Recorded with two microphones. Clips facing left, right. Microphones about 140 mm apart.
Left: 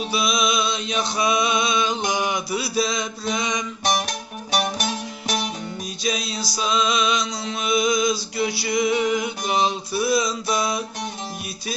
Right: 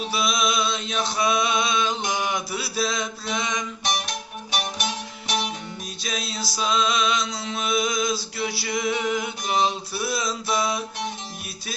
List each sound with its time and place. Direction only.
0.1 s chant: centre (ahead or behind)
2.0 s mantra: centre (ahead or behind)
3.8 s music: 45° left (ahead or behind)
6.1 s a sound: centre (ahead or behind)